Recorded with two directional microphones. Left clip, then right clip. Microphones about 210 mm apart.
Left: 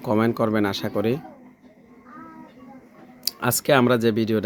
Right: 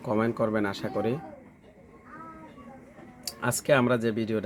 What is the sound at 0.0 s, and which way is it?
Speech, 50° left (ahead or behind).